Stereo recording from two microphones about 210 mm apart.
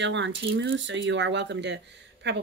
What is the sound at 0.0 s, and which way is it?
Speech, 60° right (ahead or behind).